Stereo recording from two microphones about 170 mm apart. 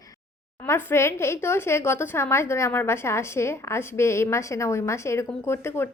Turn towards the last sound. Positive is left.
turn(degrees=15)  # may be behind; listen again after turning